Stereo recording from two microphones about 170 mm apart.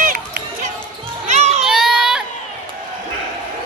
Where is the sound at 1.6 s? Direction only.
Centre (ahead or behind).